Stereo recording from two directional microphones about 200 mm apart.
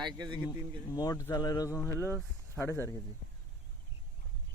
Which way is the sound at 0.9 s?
15° left (ahead or behind).